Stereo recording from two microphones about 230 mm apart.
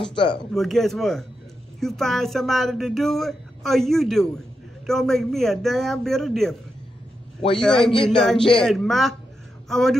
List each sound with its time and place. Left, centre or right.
0.1 s speech: left
0.5 s speech: centre
7.6 s speech: centre
7.9 s speech: left
8.6 s speech: centre